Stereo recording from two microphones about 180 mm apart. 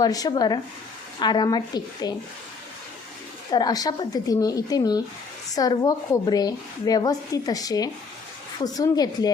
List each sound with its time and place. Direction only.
0.0 s a woman's voice: 20° left (ahead or behind)
3.5 s a woman's voice: 20° left (ahead or behind)